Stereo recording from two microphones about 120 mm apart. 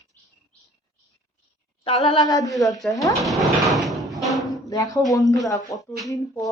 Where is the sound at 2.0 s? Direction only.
35° left (ahead or behind).